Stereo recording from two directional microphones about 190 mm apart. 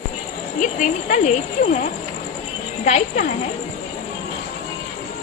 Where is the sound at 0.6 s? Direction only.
45° left (ahead or behind).